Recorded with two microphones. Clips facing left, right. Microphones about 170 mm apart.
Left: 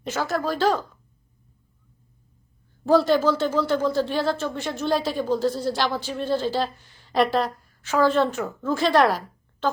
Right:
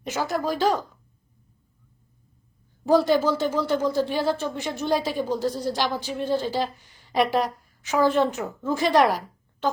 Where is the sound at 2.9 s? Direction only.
15° right (ahead or behind).